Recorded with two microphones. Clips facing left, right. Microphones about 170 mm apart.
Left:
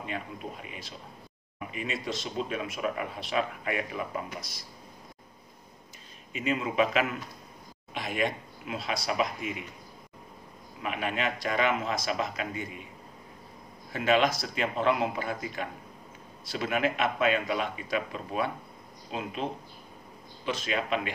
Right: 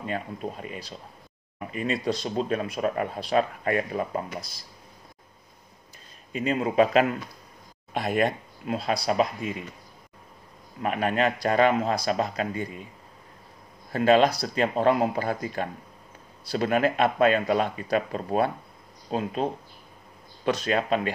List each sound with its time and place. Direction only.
0.0 s speech: 40° right (ahead or behind)
6.3 s speech: 35° right (ahead or behind)
10.8 s speech: 40° right (ahead or behind)
13.9 s speech: 35° right (ahead or behind)
20.4 s speech: 40° right (ahead or behind)